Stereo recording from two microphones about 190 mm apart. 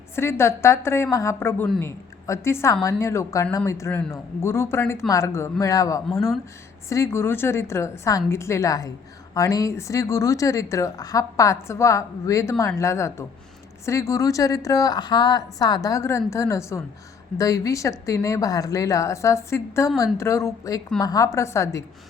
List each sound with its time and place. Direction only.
0.2 s a woman's voice: 15° left (ahead or behind)